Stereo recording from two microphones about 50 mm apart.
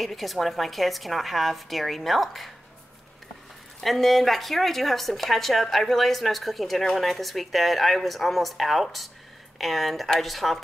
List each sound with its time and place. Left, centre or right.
0.0 s speech: centre
3.8 s speech: centre